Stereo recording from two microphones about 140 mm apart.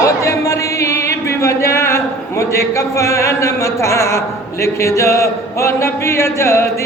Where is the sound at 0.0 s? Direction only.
20° left (ahead or behind).